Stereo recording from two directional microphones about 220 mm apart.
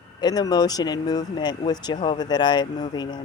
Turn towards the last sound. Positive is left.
turn(degrees=20)  # may be behind; listen again after turning